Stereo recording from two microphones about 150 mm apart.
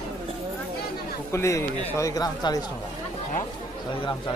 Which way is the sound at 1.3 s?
20° left (ahead or behind).